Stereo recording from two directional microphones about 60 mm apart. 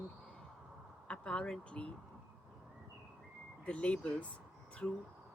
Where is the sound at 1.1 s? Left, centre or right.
Centre.